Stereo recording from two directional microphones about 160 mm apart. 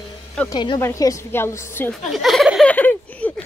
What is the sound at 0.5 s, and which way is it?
A woman's voice, 25° left (ahead or behind).